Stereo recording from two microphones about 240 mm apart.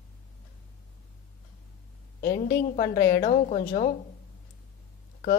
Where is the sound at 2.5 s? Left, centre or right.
Left.